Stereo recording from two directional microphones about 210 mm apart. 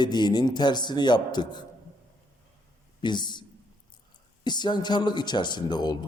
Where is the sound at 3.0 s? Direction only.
20° left (ahead or behind).